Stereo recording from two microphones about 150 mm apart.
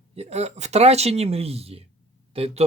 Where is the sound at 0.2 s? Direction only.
45° right (ahead or behind).